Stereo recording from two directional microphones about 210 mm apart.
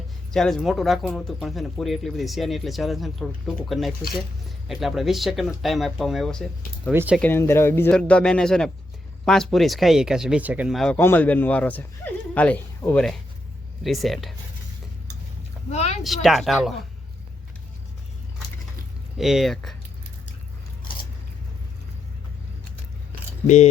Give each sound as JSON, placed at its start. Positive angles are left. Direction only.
{"t": 0.3, "sound": "speech", "side_deg": 0}
{"t": 7.2, "sound": "speech", "side_deg": 10}
{"t": 15.7, "sound": "speech", "side_deg": 30}
{"t": 16.0, "sound": "speech", "side_deg": 0}
{"t": 19.1, "sound": "speech", "side_deg": 0}